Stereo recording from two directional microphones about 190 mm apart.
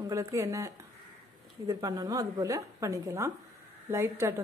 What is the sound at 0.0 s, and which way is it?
A woman's voice, 20° right (ahead or behind).